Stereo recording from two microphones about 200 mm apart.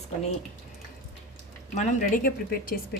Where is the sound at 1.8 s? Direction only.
45° left (ahead or behind).